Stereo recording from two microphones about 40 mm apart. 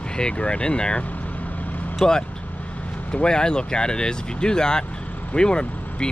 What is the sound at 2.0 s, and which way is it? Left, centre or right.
Speech, centre.